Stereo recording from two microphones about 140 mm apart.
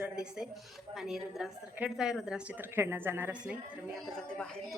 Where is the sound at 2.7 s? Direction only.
15° right (ahead or behind).